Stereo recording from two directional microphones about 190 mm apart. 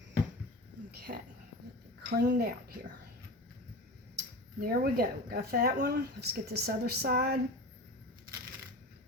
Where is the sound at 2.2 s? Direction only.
55° right (ahead or behind).